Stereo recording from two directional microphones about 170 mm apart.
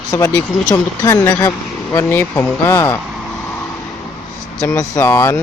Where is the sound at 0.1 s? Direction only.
15° left (ahead or behind).